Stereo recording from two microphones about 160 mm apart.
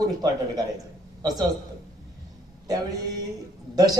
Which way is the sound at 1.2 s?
25° right (ahead or behind).